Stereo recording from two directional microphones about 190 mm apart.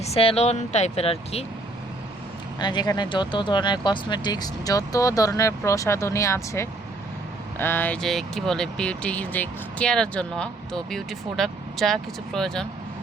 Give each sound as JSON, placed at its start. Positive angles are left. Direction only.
{"t": 0.0, "sound": "speech", "side_deg": 30}
{"t": 2.6, "sound": "speech", "side_deg": 25}